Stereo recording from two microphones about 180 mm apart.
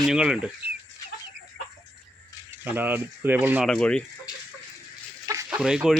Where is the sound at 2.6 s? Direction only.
10° right (ahead or behind).